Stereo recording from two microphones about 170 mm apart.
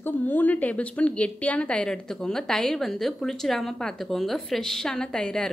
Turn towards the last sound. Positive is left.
turn(degrees=5)  # may be behind; listen again after turning